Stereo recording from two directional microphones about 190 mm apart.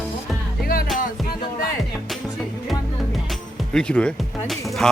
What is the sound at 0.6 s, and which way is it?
Music, 50° left (ahead or behind).